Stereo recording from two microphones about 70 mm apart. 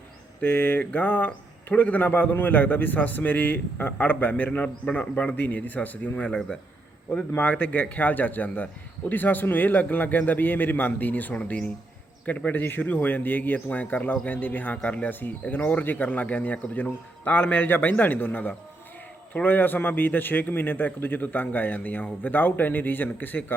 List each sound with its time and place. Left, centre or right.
0.4 s a man's voice: left